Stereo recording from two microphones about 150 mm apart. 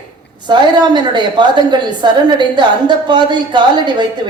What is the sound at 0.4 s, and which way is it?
A woman's voice, 30° right (ahead or behind).